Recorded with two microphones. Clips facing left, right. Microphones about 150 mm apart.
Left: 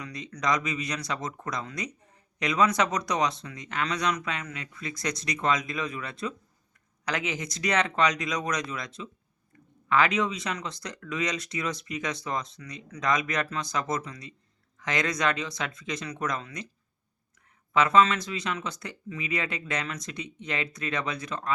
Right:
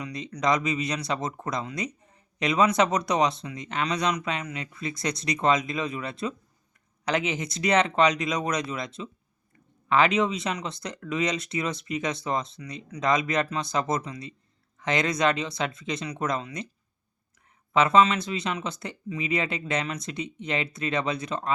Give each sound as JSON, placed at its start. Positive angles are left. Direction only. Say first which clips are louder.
{"t": 0.0, "sound": "speech", "louder": "right 4 dB", "side_deg": -20}
{"t": 9.9, "sound": "speech", "louder": "right 3 dB", "side_deg": -25}
{"t": 17.7, "sound": "speech", "louder": "right 2 dB", "side_deg": -25}